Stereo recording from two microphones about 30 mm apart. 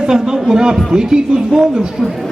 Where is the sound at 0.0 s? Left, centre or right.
Right.